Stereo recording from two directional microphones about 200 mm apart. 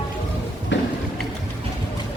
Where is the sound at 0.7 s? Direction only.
60° left (ahead or behind).